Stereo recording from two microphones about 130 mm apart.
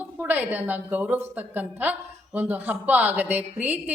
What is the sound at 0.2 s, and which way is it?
A woman's voice, 15° right (ahead or behind).